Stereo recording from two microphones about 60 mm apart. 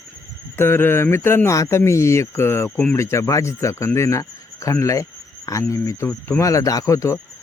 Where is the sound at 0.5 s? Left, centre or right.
Left.